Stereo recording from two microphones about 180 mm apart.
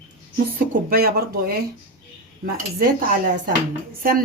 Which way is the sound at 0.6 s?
55° right (ahead or behind).